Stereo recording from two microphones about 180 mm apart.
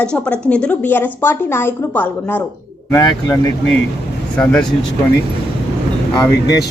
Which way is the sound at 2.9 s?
25° left (ahead or behind).